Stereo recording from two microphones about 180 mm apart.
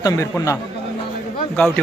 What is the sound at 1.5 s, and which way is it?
Speech, 5° left (ahead or behind).